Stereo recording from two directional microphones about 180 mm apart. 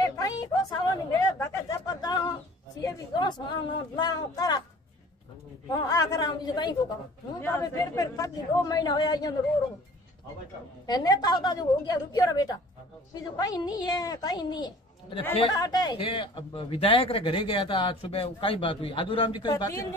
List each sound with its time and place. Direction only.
0.2 s a sound: 20° left (ahead or behind)
2.8 s speech: 20° left (ahead or behind)
5.7 s speech: 20° left (ahead or behind)
10.9 s speech: 20° left (ahead or behind)